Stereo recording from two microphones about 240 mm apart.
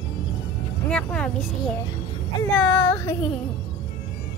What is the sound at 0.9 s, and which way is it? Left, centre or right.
Vehicle, centre.